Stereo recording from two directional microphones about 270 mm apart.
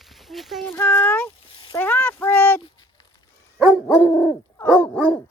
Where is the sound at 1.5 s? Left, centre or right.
Centre.